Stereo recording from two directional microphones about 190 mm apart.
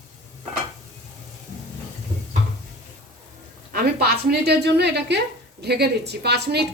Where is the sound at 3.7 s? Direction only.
55° right (ahead or behind).